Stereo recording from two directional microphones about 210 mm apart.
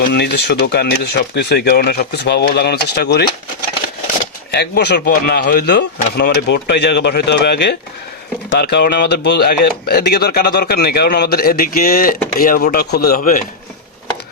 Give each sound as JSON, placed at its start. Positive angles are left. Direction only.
{"t": 0.0, "sound": "speech", "side_deg": 50}
{"t": 4.5, "sound": "speech", "side_deg": 50}